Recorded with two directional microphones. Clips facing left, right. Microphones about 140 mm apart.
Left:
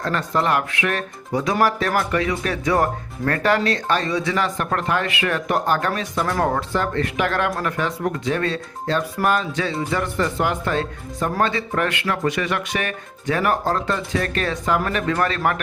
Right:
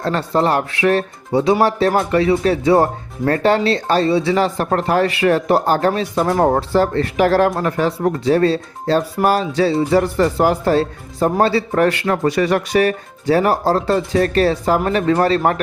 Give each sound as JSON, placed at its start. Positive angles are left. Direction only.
{"t": 0.0, "sound": "speech", "side_deg": -30}